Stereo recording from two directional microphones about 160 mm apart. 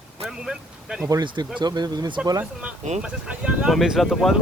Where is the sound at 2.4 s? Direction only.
10° right (ahead or behind).